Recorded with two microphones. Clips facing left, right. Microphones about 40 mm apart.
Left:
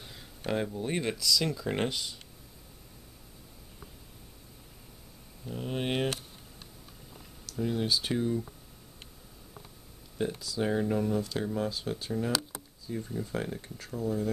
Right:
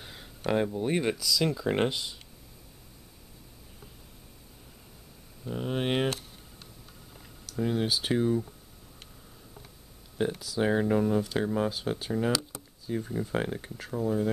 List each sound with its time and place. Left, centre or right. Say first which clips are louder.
0.0 s a sound: right 2 dB; right
0.5 s speech: right 4 dB; centre
5.4 s speech: right 3 dB; centre
7.5 s speech: right 2 dB; right
10.2 s speech: right 3 dB; right
12.9 s speech: right 4 dB; right
13.7 s speech: right 3 dB; centre